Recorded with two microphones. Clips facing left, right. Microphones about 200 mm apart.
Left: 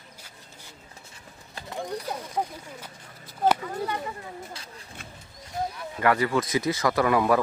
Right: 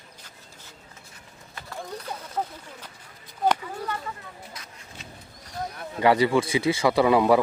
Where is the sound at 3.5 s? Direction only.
10° left (ahead or behind).